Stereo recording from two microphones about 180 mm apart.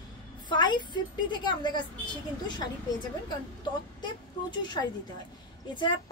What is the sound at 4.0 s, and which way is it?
A woman's voice, 25° left (ahead or behind).